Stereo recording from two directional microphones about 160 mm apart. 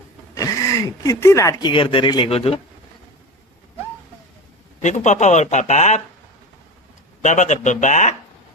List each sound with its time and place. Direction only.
0.3 s speech: 20° left (ahead or behind); by 2.6 s 35° left (ahead or behind)
4.8 s speech: 50° left (ahead or behind)
7.2 s speech: 50° left (ahead or behind)